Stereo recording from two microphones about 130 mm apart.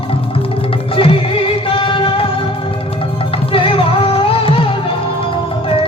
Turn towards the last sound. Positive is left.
turn(degrees=45)  # may be behind; listen again after turning